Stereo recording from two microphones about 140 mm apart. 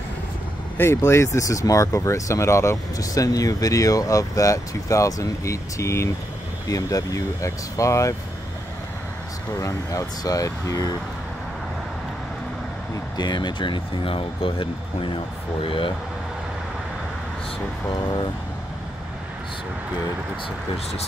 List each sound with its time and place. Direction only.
0.7 s speech: 20° left (ahead or behind)
9.6 s speech: 25° left (ahead or behind)
13.2 s speech: 30° left (ahead or behind)